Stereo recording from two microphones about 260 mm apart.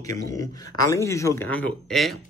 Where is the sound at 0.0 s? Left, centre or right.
Centre.